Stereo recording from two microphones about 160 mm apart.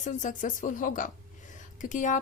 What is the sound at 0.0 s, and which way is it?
A woman's voice, 50° left (ahead or behind).